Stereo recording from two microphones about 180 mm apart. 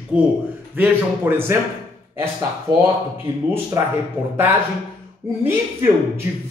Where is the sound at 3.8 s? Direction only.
20° right (ahead or behind).